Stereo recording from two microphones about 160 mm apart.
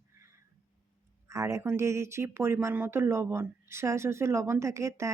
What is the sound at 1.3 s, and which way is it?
Speech, 20° right (ahead or behind).